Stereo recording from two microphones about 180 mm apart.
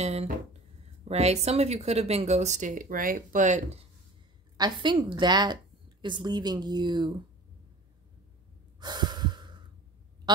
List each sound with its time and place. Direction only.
0.0 s speech: 35° right (ahead or behind)
4.6 s a woman's voice: 20° right (ahead or behind)
8.7 s breathing: 25° right (ahead or behind)